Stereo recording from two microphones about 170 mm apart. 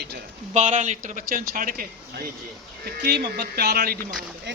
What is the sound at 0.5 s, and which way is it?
A man's voice, 45° right (ahead or behind).